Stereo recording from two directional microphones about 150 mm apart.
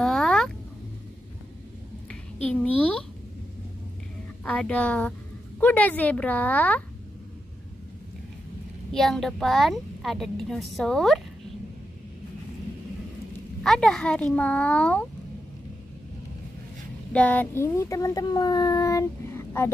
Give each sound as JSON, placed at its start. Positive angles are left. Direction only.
{"t": 0.0, "sound": "a sound", "side_deg": 5}
{"t": 2.4, "sound": "a woman's voice", "side_deg": 5}
{"t": 4.5, "sound": "a child's voice", "side_deg": 10}
{"t": 8.9, "sound": "a woman's voice", "side_deg": 0}
{"t": 13.6, "sound": "a child's voice", "side_deg": 5}
{"t": 17.1, "sound": "a child's voice", "side_deg": 10}